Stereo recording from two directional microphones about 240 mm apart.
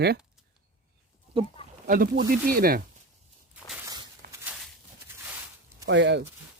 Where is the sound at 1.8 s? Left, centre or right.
Right.